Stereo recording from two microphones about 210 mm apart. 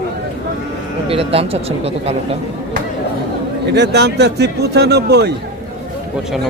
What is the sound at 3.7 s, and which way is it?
A man's voice, 55° right (ahead or behind).